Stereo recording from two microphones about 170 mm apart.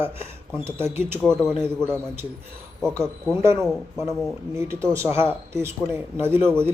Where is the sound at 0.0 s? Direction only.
15° right (ahead or behind).